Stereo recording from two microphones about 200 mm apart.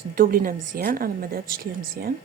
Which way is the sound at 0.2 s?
45° right (ahead or behind).